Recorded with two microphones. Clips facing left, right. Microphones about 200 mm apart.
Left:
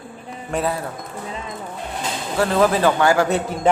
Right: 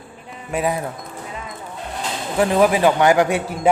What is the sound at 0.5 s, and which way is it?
Speech, 15° right (ahead or behind).